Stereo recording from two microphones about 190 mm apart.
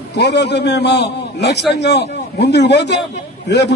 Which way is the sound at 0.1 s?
65° left (ahead or behind).